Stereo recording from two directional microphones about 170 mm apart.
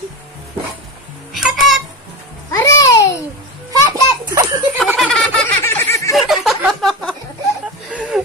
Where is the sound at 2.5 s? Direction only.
15° left (ahead or behind).